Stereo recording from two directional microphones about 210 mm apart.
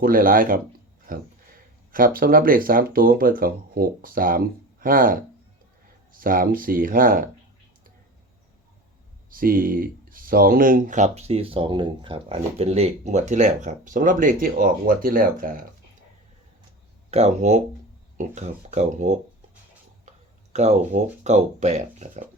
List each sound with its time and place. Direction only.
0.0 s speech: 40° right (ahead or behind)
9.3 s speech: 40° right (ahead or behind)
17.1 s speech: 30° right (ahead or behind)
20.5 s speech: 35° right (ahead or behind)